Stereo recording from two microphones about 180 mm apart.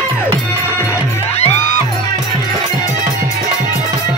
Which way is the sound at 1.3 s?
35° left (ahead or behind).